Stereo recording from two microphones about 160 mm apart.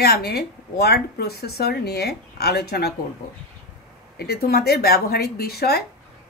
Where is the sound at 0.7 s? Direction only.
90° left.